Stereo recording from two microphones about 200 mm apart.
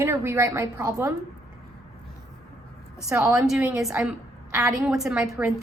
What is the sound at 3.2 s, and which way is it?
A woman's voice, 5° right (ahead or behind).